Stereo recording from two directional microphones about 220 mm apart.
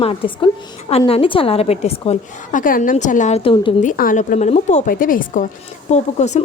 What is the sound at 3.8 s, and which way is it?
A woman's voice, 40° left (ahead or behind).